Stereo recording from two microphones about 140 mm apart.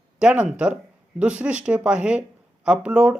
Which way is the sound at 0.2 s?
5° right (ahead or behind).